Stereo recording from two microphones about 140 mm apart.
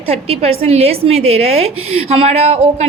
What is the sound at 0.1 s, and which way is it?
A woman's voice, 45° right (ahead or behind).